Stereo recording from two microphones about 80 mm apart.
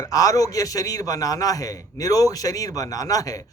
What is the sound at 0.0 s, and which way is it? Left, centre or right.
A man's voice, left.